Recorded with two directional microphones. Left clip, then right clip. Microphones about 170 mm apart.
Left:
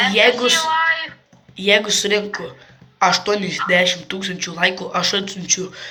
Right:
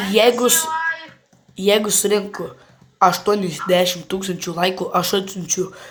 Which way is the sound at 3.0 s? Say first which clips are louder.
Right 1 dB; 30° right (ahead or behind).